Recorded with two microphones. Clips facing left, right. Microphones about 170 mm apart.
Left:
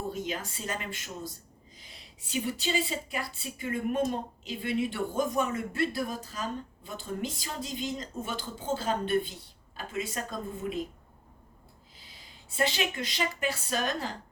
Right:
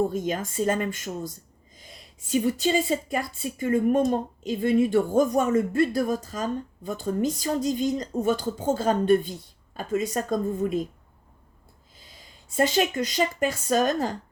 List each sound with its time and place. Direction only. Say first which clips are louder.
0.1 s speech: right 7 dB; 45° right (ahead or behind)
11.9 s speech: right 4 dB; 45° right (ahead or behind)